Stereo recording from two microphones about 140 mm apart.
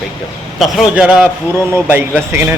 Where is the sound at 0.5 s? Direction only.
Centre (ahead or behind).